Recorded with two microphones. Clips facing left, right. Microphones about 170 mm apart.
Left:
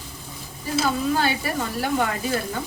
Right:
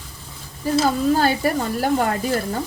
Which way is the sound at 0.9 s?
40° right (ahead or behind).